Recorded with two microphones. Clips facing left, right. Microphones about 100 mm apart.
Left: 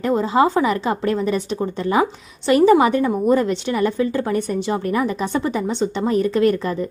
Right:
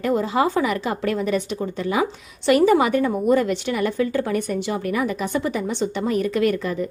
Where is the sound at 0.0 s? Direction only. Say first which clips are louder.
Left 3 dB; 25° left (ahead or behind).